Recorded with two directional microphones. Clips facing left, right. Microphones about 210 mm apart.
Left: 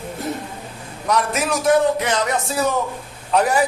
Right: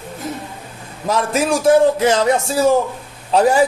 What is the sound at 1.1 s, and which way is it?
A man's voice, 30° right (ahead or behind).